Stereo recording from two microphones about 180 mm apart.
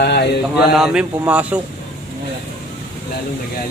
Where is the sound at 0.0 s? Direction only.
65° left (ahead or behind).